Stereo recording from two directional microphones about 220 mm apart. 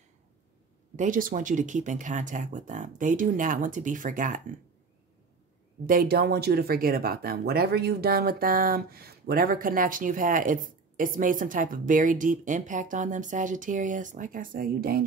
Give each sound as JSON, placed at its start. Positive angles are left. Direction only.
{"t": 0.9, "sound": "speech", "side_deg": -35}
{"t": 5.9, "sound": "speech", "side_deg": -45}